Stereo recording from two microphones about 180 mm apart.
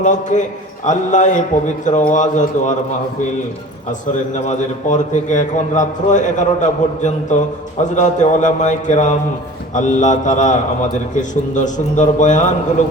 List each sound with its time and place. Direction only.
0.0 s a man's voice: 45° left (ahead or behind)
4.4 s a man's voice: 40° left (ahead or behind)